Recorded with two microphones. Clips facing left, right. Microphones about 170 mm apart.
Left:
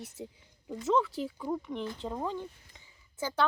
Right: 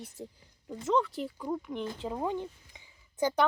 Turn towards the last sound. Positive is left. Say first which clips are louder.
# right 6 dB
turn(degrees=-15)  # may be behind; listen again after turning